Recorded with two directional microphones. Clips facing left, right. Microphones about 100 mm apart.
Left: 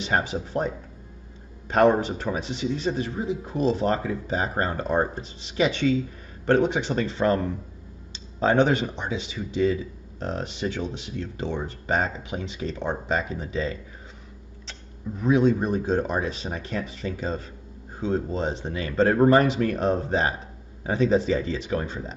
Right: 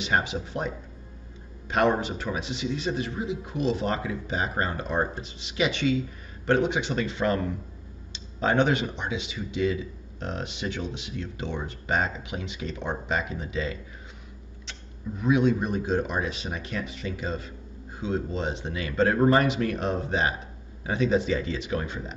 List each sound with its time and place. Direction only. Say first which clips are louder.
0.0 s a man's voice: left 1 dB; 40° left (ahead or behind)
15.2 s a man's voice: left 2 dB; 40° left (ahead or behind)